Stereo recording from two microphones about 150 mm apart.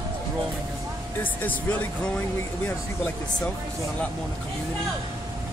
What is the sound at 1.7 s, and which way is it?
Speech, 15° left (ahead or behind).